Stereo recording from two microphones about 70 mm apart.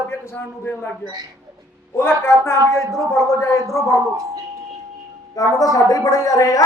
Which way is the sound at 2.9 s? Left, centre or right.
Left.